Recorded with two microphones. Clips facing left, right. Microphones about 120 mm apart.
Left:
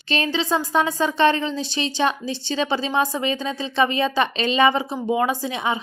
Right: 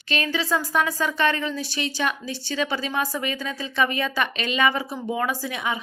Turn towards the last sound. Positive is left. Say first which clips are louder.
# left 4 dB
turn(degrees=25)  # may be behind; listen again after turning